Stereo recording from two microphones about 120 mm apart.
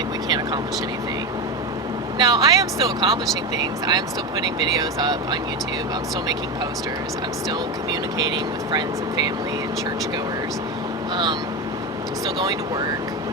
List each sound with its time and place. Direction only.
0.3 s speech: 35° right (ahead or behind)
2.1 s speech: 35° right (ahead or behind)
8.7 s speech: 35° right (ahead or behind)